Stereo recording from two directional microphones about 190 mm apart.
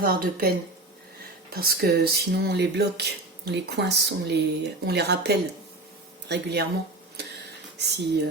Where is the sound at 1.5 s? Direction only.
55° right (ahead or behind).